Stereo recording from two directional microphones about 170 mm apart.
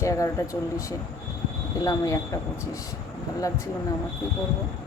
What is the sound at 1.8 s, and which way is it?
Speech, 20° left (ahead or behind).